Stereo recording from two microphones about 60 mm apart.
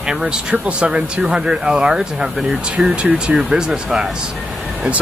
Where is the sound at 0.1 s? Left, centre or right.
Centre.